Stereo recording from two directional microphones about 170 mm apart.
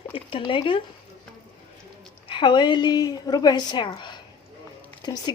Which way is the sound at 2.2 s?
30° left (ahead or behind).